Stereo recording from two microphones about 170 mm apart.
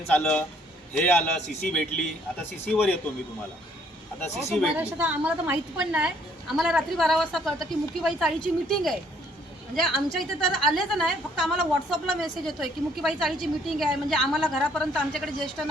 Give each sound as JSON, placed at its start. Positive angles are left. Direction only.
{"t": 0.1, "sound": "a woman's voice", "side_deg": 10}
{"t": 4.2, "sound": "speech", "side_deg": 15}
{"t": 4.5, "sound": "a woman's voice", "side_deg": -5}